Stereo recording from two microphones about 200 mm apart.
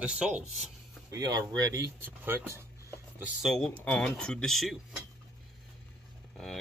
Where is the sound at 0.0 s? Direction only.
5° right (ahead or behind).